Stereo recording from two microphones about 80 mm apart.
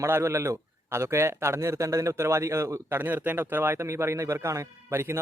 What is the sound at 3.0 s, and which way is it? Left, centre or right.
Speech, right.